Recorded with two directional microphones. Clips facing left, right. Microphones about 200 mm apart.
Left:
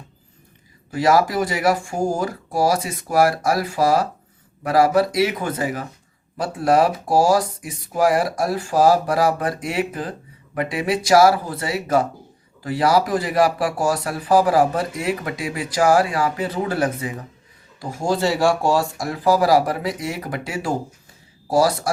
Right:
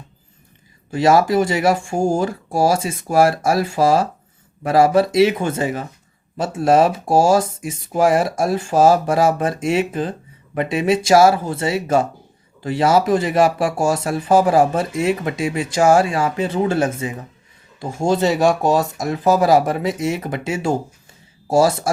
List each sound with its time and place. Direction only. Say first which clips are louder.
0.9 s speech: right 3 dB; 25° right (ahead or behind)